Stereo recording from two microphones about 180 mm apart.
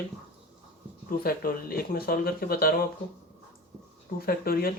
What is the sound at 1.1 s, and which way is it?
Speech, 55° left (ahead or behind).